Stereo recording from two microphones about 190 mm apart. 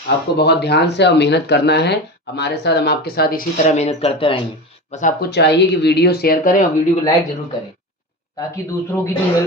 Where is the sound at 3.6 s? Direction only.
35° left (ahead or behind).